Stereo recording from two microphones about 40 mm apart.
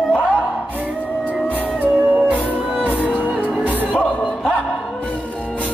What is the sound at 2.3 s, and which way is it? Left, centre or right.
Music, right.